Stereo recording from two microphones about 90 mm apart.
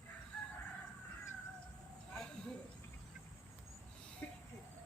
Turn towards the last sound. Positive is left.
turn(degrees=20)  # may be behind; listen again after turning